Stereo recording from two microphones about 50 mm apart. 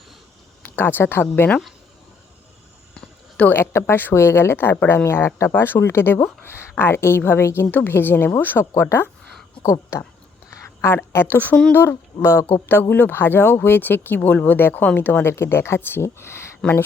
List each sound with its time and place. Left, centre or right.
0.8 s speech: left
2.9 s a sound: left
3.5 s a woman's voice: left
7.4 s speech: left
7.7 s speech: left
10.8 s speech: left
12.5 s speech: left
14.2 s speech: left
15.3 s speech: left